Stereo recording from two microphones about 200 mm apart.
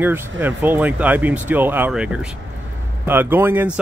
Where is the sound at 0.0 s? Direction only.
10° right (ahead or behind).